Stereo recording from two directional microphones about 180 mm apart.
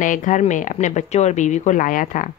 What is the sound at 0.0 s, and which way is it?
Speech, 45° left (ahead or behind).